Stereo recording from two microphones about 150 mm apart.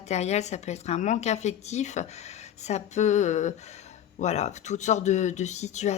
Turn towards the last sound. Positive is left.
turn(degrees=50)  # may be behind; listen again after turning